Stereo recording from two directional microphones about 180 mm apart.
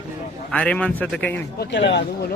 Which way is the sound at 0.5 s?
5° left (ahead or behind).